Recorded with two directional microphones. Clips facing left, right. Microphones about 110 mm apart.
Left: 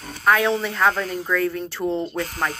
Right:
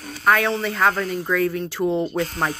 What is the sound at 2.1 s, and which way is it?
Speech, 20° right (ahead or behind).